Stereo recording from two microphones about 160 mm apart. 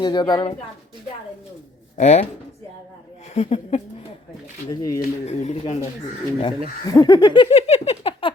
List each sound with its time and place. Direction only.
0.0 s speech: 30° left (ahead or behind)
2.0 s speech: 45° left (ahead or behind)
3.3 s speech: 40° left (ahead or behind)
4.7 s speech: 20° left (ahead or behind)
5.2 s speech: 45° left (ahead or behind)
6.8 s a sound: 25° left (ahead or behind)